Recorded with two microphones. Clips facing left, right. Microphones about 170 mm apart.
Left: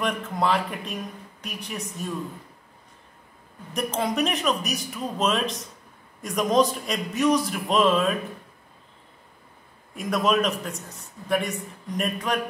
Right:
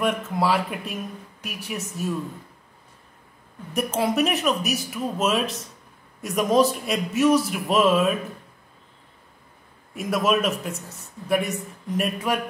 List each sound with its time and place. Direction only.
0.0 s a man's voice: 5° right (ahead or behind)
3.7 s a man's voice: 5° right (ahead or behind)
9.9 s a man's voice: 5° right (ahead or behind)